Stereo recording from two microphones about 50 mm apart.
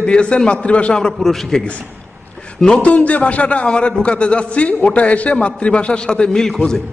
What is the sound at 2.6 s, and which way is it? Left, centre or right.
A man's voice, left.